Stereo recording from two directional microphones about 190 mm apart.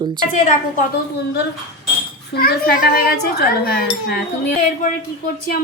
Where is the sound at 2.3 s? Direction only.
55° left (ahead or behind).